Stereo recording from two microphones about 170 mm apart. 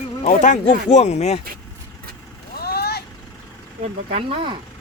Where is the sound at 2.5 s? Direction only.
65° left (ahead or behind).